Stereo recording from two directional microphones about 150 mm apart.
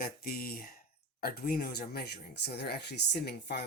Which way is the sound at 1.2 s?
90° left.